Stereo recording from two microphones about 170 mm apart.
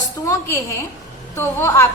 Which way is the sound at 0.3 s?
20° left (ahead or behind).